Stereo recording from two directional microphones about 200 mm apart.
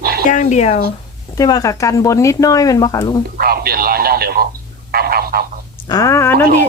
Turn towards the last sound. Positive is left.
turn(degrees=10)  # may be behind; listen again after turning